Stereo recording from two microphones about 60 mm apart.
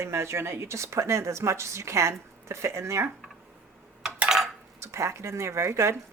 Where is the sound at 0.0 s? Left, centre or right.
Right.